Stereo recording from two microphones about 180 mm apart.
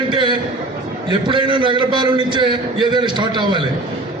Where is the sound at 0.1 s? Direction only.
25° right (ahead or behind).